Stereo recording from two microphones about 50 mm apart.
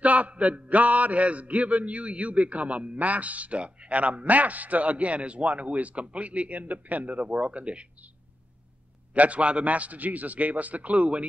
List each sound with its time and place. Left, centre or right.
0.0 s a man's voice: right
9.1 s a man's voice: right